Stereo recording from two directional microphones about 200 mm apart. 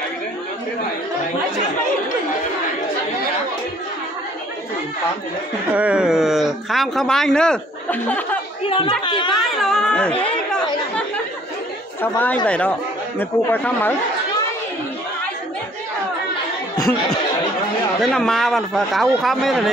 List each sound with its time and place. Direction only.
5.7 s speech: 5° right (ahead or behind)
8.6 s speech: 25° left (ahead or behind)
9.6 s speech: 5° left (ahead or behind)
12.0 s speech: 10° left (ahead or behind)
18.0 s speech: centre (ahead or behind)